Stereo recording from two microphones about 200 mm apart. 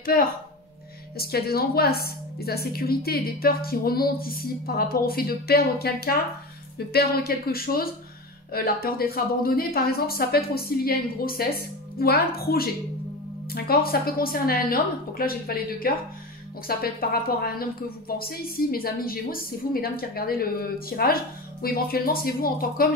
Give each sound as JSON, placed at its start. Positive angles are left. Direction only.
{"t": 1.1, "sound": "a woman's voice", "side_deg": 50}